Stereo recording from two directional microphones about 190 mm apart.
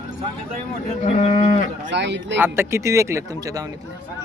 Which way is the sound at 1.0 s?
35° left (ahead or behind).